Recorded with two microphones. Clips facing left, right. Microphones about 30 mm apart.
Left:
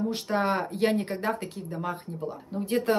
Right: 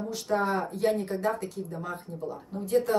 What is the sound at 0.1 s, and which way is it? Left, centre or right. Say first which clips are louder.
Speech: left 1 dB; left.